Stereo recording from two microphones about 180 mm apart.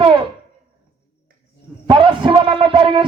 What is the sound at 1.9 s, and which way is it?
A man's voice, 25° right (ahead or behind).